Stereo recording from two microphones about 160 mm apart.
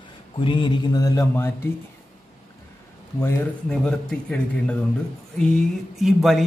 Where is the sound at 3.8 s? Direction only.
5° left (ahead or behind).